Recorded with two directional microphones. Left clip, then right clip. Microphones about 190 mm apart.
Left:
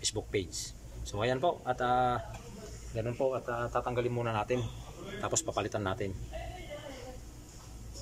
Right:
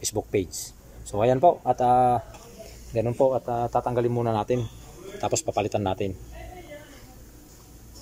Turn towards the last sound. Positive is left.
turn(degrees=-15)  # may be behind; listen again after turning